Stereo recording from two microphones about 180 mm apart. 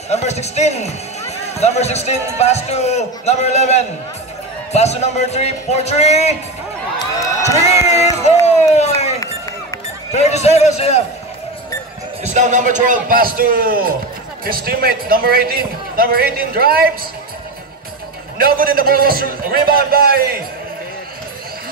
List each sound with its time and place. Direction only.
0.1 s a man's voice: 35° left (ahead or behind)
7.5 s crowd: 40° left (ahead or behind)
8.7 s run: 40° left (ahead or behind)
10.1 s a man's voice: 40° left (ahead or behind)
12.2 s a man's voice: 40° right (ahead or behind)
18.4 s a man's voice: 55° right (ahead or behind)